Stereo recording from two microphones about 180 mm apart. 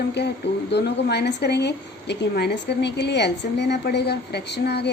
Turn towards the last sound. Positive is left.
turn(degrees=70)  # may be behind; listen again after turning